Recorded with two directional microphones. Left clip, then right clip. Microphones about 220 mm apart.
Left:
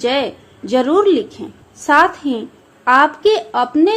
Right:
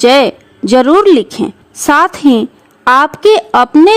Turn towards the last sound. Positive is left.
turn(degrees=-50)  # may be behind; listen again after turning